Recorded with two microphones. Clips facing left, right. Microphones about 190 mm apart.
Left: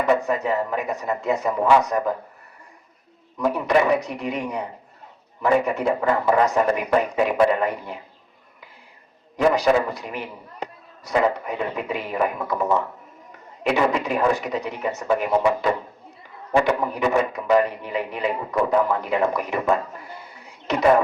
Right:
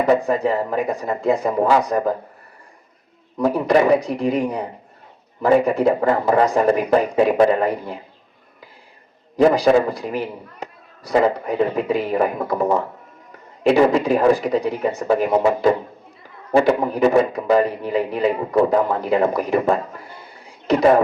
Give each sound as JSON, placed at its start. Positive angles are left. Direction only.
{"t": 0.0, "sound": "a man's voice", "side_deg": -30}
{"t": 3.3, "sound": "a man's voice", "side_deg": -35}
{"t": 9.3, "sound": "a man's voice", "side_deg": -35}